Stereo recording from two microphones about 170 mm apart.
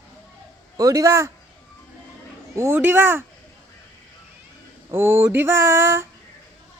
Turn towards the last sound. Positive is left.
turn(degrees=-15)  # may be behind; listen again after turning